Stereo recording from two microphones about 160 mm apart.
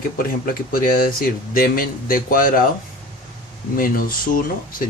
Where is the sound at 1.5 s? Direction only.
60° left (ahead or behind).